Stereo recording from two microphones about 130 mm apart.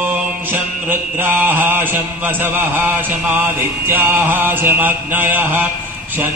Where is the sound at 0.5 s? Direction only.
15° right (ahead or behind).